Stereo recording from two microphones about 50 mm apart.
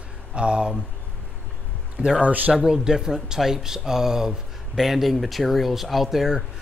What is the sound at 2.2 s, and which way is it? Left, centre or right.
Speech, right.